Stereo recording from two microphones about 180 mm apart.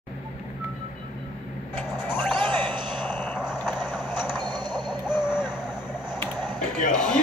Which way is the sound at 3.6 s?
5° right (ahead or behind).